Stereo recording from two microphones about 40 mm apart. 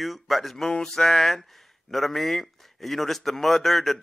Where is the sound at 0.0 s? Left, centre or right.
Centre.